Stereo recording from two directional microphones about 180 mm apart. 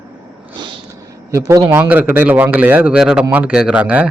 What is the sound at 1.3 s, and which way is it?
A man's voice, 15° right (ahead or behind).